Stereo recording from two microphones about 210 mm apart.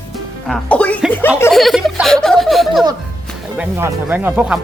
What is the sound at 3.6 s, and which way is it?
Speech, 10° right (ahead or behind).